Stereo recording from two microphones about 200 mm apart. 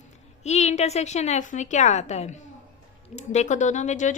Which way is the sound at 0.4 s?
35° left (ahead or behind).